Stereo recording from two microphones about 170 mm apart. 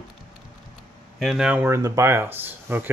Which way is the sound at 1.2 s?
5° right (ahead or behind).